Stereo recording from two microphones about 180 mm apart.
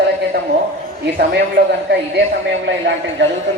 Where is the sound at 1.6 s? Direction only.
55° right (ahead or behind).